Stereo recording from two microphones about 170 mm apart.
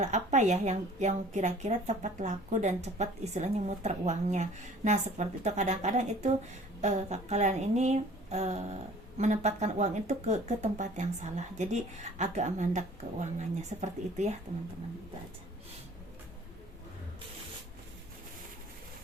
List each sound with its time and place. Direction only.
0.0 s a woman's voice: 45° right (ahead or behind)